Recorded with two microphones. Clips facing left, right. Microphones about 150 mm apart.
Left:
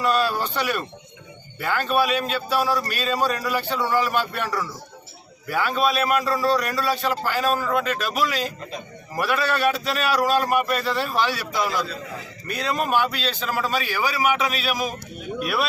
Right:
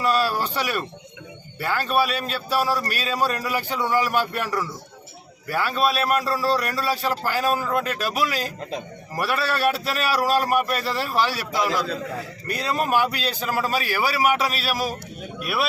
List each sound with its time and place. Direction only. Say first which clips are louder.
0.0 s a man's voice: even; 5° right (ahead or behind)
11.9 s a man's voice: right 5 dB; 60° right (ahead or behind)
12.5 s a man's voice: even; 5° right (ahead or behind)